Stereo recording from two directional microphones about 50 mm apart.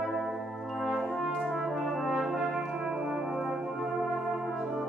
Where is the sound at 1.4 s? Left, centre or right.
Centre.